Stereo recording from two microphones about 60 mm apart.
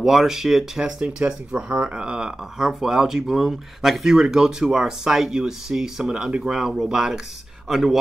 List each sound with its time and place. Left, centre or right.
0.0 s speech: centre